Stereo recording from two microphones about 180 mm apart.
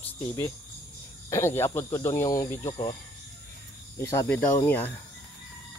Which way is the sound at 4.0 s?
15° left (ahead or behind).